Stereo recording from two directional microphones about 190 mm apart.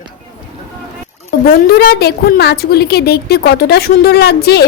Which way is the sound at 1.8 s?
55° left (ahead or behind).